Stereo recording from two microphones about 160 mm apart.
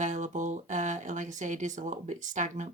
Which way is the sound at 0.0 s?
50° right (ahead or behind).